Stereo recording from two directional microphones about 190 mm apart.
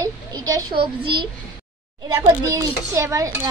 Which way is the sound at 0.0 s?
20° right (ahead or behind).